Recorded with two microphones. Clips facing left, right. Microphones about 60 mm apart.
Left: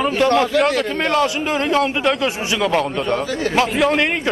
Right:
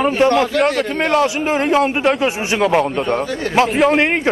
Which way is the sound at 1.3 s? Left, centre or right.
Right.